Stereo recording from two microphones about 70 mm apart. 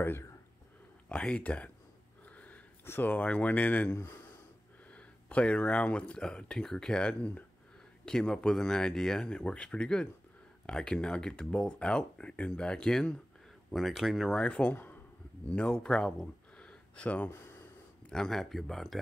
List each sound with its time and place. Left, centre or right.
1.0 s speech: centre
2.2 s wheeze: left
2.8 s speech: left
4.9 s speech: centre
13.7 s speech: centre
14.4 s speech: left
15.4 s speech: centre
18.1 s speech: centre